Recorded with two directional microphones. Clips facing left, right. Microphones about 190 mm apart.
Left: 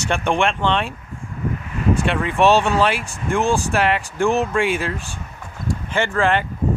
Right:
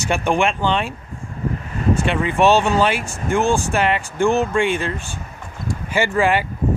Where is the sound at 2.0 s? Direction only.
Centre (ahead or behind).